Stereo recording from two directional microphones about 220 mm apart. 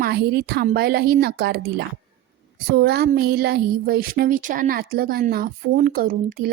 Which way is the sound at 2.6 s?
45° right (ahead or behind).